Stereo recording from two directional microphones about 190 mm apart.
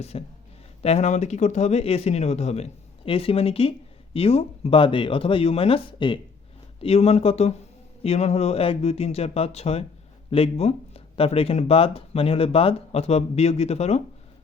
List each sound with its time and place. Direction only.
0.1 s speech: 30° left (ahead or behind)